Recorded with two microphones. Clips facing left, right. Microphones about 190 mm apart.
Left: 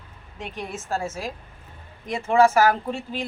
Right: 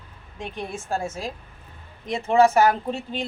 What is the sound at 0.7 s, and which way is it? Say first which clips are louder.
Speech: even; 15° right (ahead or behind).